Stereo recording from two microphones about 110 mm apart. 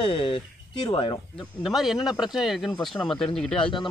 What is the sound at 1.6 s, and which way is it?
A man's voice, 5° right (ahead or behind).